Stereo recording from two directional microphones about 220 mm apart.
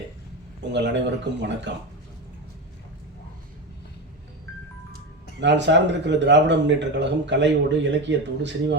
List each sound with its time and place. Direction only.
0.7 s speech: 50° right (ahead or behind)
5.4 s speech: 55° right (ahead or behind)